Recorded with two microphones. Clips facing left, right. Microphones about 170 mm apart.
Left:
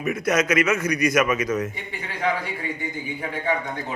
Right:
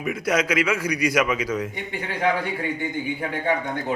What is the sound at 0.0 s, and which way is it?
A man's voice, 10° right (ahead or behind).